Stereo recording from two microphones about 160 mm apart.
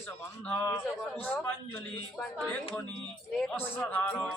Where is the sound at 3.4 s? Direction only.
10° left (ahead or behind).